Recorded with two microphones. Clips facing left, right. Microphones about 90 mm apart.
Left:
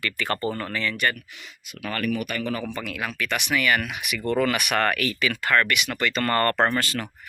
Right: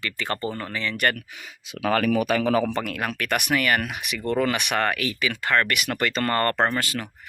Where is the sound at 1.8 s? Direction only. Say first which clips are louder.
Right 6 dB; 90° right.